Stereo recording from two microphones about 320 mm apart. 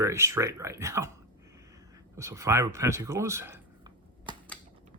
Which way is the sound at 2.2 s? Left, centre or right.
Centre.